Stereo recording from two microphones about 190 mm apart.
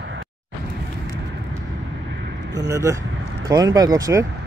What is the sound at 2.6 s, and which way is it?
Speech, 15° right (ahead or behind).